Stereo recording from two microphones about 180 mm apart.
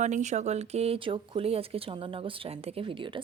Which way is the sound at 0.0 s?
40° right (ahead or behind).